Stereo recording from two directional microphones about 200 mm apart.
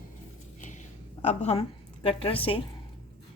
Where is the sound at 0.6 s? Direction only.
40° left (ahead or behind).